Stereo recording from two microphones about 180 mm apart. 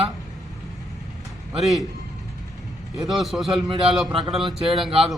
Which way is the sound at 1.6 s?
Centre (ahead or behind).